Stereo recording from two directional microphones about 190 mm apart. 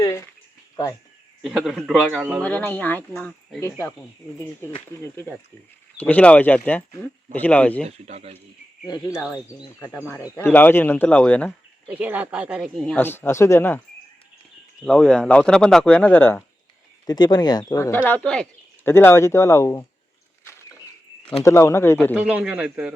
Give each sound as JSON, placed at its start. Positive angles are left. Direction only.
{"t": 0.0, "sound": "speech", "side_deg": 15}
{"t": 1.4, "sound": "speech", "side_deg": 0}
{"t": 2.4, "sound": "speech", "side_deg": 10}
{"t": 7.9, "sound": "speech", "side_deg": -35}
{"t": 8.9, "sound": "speech", "side_deg": 20}
{"t": 11.9, "sound": "speech", "side_deg": -10}
{"t": 14.8, "sound": "speech", "side_deg": 5}
{"t": 17.1, "sound": "speech", "side_deg": 20}
{"t": 20.4, "sound": "vehicle", "side_deg": 15}
{"t": 21.4, "sound": "speech", "side_deg": 15}
{"t": 22.1, "sound": "speech", "side_deg": -5}